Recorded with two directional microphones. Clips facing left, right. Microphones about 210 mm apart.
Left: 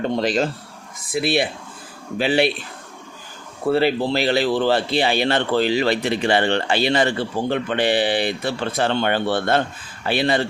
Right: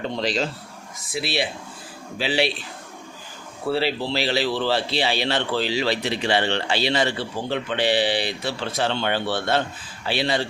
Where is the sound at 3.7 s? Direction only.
50° left (ahead or behind).